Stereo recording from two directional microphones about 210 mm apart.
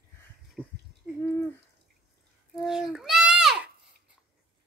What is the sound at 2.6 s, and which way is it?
Speech, 5° right (ahead or behind).